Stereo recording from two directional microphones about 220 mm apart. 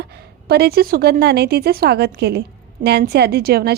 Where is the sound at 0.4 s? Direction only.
45° right (ahead or behind).